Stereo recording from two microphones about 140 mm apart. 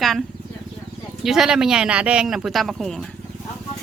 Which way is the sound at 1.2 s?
5° right (ahead or behind).